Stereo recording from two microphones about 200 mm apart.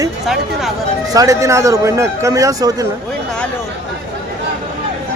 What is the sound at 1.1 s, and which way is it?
Speech, 15° right (ahead or behind).